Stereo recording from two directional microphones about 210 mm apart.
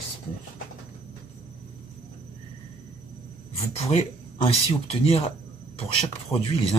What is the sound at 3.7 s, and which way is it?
Speech, 30° left (ahead or behind).